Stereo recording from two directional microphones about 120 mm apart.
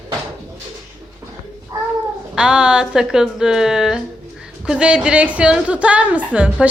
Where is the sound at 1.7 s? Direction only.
30° right (ahead or behind).